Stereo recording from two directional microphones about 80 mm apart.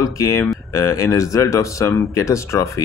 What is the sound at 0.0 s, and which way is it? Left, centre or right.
Speech, left.